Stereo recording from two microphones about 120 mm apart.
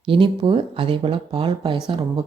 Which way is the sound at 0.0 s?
45° right (ahead or behind).